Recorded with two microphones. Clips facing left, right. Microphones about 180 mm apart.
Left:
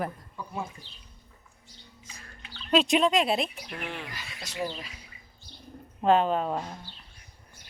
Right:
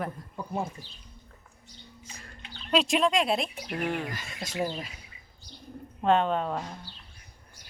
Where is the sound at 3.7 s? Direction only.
45° right (ahead or behind).